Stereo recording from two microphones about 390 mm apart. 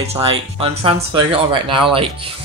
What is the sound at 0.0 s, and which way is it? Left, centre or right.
Speech, centre.